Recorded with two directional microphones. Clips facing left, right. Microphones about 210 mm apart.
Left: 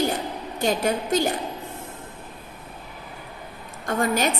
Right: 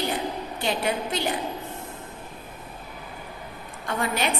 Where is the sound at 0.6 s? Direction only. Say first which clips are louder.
Left 4 dB; 45° left (ahead or behind).